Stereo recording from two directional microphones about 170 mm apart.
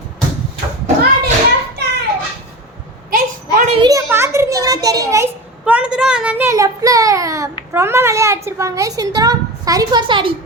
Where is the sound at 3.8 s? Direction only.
15° right (ahead or behind).